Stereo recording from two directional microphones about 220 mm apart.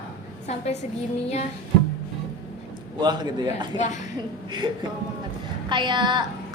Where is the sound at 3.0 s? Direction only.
20° right (ahead or behind).